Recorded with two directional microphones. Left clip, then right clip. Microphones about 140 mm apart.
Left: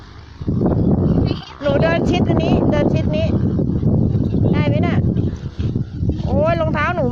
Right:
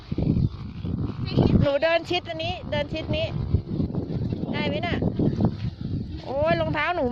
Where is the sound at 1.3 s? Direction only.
15° right (ahead or behind).